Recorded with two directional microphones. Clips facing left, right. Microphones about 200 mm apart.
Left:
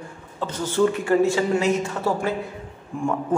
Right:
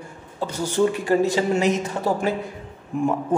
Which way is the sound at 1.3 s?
15° right (ahead or behind).